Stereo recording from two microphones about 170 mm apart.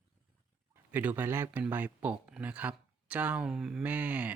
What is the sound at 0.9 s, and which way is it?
Speech, 10° right (ahead or behind).